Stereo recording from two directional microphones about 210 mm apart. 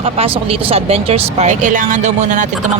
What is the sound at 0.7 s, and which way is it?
Speech, 30° right (ahead or behind).